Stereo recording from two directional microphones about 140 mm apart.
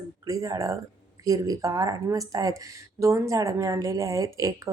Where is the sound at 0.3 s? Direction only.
25° right (ahead or behind).